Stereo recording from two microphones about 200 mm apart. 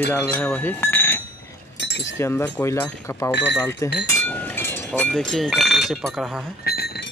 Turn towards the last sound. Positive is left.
turn(degrees=55)  # may be behind; listen again after turning